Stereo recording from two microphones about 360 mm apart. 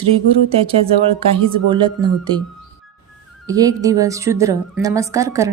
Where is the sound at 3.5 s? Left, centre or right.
Centre.